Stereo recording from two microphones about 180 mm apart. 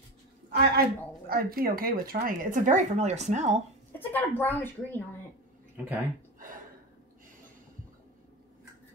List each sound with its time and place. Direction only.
0.5 s a woman's voice: 65° right (ahead or behind); by 3.6 s 40° right (ahead or behind)
4.0 s a woman's voice: 10° left (ahead or behind)